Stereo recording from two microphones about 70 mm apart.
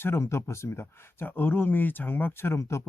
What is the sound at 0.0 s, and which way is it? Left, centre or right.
Speech, left.